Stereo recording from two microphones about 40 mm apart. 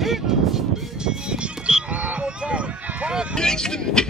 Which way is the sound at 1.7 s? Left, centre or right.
Right.